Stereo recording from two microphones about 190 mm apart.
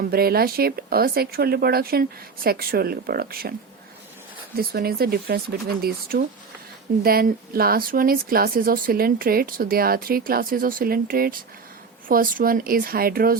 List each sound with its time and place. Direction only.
0.0 s a woman's voice: 55° right (ahead or behind)
4.5 s a woman's voice: 55° right (ahead or behind)